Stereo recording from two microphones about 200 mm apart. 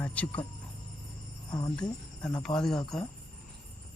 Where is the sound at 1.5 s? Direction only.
20° left (ahead or behind).